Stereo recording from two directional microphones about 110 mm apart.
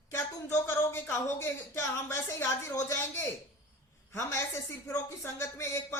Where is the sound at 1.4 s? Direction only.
25° left (ahead or behind).